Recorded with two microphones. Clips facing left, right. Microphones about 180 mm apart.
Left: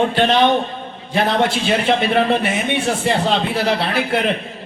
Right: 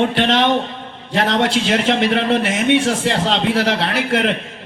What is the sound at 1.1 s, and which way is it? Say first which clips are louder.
A man's voice: even; 85° right.